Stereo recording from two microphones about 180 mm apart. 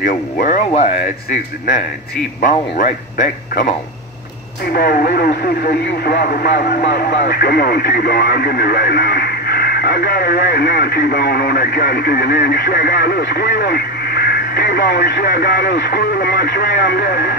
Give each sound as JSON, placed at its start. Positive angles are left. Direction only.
{"t": 0.0, "sound": "speech", "side_deg": 50}
{"t": 0.7, "sound": "speech", "side_deg": 35}
{"t": 4.7, "sound": "speech", "side_deg": 55}